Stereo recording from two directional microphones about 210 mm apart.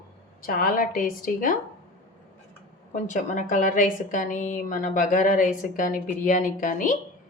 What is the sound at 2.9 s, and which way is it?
A woman's voice, 35° left (ahead or behind).